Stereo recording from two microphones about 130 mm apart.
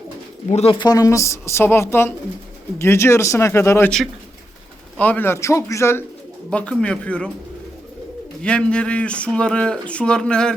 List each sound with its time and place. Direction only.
0.5 s speech: 45° left (ahead or behind); by 3.8 s 20° left (ahead or behind)
3.8 s speech: 5° left (ahead or behind); by 6.1 s 20° left (ahead or behind)
6.5 s speech: 10° left (ahead or behind)
8.4 s speech: 10° left (ahead or behind)